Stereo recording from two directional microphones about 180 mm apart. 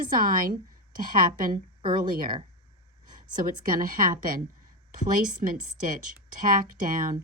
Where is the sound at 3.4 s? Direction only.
50° right (ahead or behind).